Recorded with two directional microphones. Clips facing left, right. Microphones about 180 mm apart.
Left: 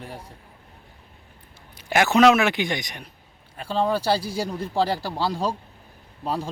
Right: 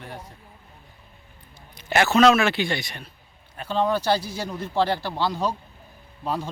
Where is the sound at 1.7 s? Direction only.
10° left (ahead or behind).